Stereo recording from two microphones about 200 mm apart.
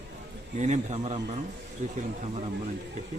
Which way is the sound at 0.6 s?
35° right (ahead or behind).